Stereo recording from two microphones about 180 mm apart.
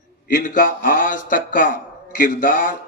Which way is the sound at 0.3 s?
50° left (ahead or behind).